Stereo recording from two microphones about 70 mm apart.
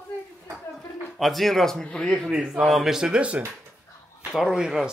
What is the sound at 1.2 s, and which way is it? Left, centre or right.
A man's voice, centre.